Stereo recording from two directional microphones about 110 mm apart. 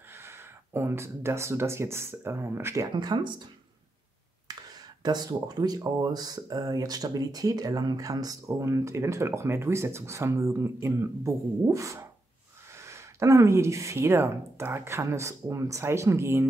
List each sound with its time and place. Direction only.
0.1 s speech: 25° right (ahead or behind); by 3.4 s 40° right (ahead or behind)
4.5 s speech: 35° right (ahead or behind)